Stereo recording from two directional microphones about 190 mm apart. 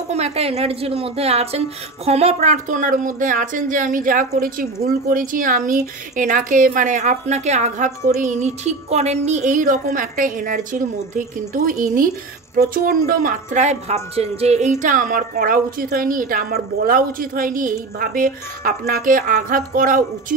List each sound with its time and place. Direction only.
0.1 s a woman's voice: 35° right (ahead or behind)